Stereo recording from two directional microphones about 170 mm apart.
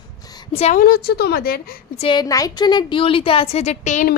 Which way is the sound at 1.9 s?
30° left (ahead or behind).